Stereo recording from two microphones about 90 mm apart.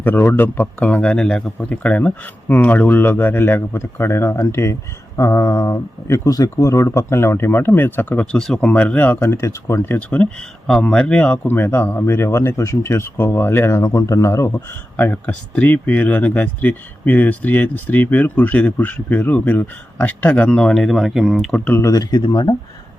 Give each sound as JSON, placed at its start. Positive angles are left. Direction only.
{"t": 0.0, "sound": "speech", "side_deg": 25}
{"t": 8.4, "sound": "speech", "side_deg": 5}
{"t": 14.9, "sound": "speech", "side_deg": 20}
{"t": 21.7, "sound": "speech", "side_deg": 30}
{"t": 21.9, "sound": "speech", "side_deg": 45}